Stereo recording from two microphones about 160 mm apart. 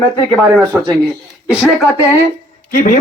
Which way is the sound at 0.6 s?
20° right (ahead or behind).